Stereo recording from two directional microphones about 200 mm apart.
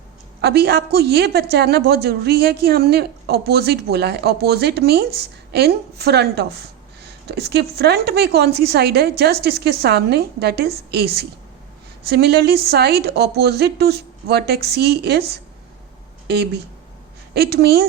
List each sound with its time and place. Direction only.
0.4 s a woman's voice: 55° right (ahead or behind)
16.2 s a woman's voice: 55° right (ahead or behind)